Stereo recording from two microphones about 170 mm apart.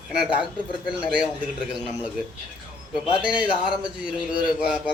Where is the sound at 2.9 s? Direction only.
5° right (ahead or behind).